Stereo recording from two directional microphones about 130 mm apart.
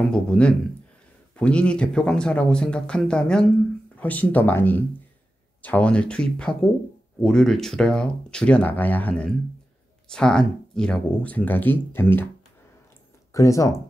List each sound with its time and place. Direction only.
0.1 s speech: 5° left (ahead or behind)
13.3 s speech: 25° left (ahead or behind)